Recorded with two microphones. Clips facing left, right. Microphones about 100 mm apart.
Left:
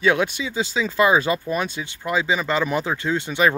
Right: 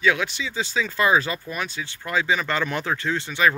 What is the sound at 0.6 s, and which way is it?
Speech, 10° left (ahead or behind).